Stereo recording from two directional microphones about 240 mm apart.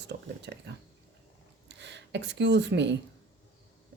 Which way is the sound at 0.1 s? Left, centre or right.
Right.